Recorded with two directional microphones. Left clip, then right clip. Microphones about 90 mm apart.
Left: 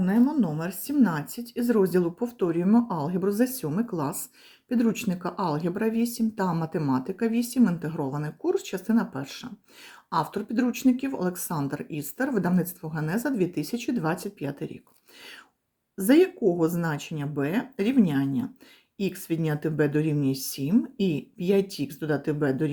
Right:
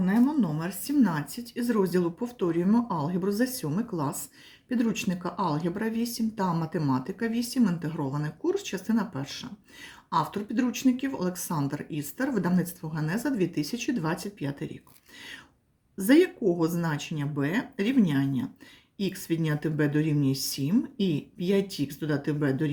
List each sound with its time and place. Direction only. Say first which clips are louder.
0.0 s speech: left 1 dB; 15° left (ahead or behind)
0.6 s speech: left 1 dB; 20° left (ahead or behind)
6.5 s speech: left 1 dB; 25° left (ahead or behind)
7.6 s speech: left 3 dB; 20° left (ahead or behind)
16.0 s speech: left 1 dB; 25° left (ahead or behind)